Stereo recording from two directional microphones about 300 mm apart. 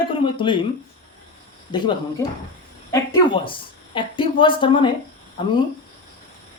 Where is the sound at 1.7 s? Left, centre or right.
Centre.